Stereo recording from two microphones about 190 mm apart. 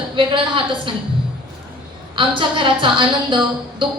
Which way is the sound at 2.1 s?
25° right (ahead or behind).